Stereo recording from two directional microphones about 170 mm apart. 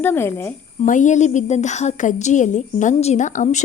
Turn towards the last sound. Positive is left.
turn(degrees=45)  # may be behind; listen again after turning